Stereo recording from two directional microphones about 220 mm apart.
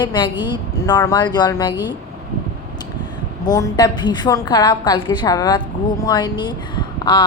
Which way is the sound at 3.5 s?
15° left (ahead or behind).